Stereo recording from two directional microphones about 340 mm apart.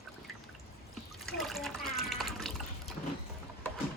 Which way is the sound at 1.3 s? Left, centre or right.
Centre.